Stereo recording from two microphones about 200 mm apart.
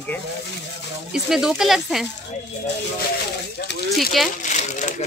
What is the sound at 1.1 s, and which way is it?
Speech, 5° right (ahead or behind).